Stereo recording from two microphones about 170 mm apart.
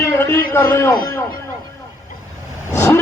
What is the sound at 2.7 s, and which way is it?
Vehicle, 15° left (ahead or behind).